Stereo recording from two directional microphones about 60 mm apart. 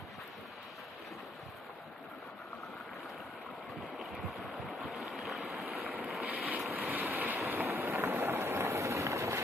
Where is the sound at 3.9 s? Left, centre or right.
Centre.